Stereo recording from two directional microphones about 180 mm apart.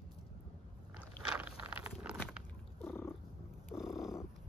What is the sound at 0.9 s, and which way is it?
Vehicle, 5° right (ahead or behind).